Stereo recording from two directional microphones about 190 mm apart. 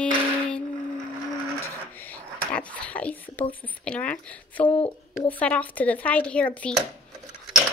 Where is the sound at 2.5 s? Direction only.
5° left (ahead or behind).